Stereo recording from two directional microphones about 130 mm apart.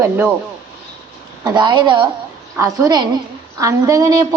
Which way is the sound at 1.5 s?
35° right (ahead or behind).